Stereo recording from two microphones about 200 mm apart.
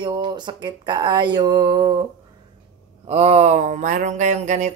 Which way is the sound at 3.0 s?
30° right (ahead or behind).